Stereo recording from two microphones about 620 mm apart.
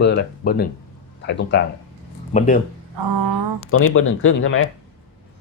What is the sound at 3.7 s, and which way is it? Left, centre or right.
Speech, centre.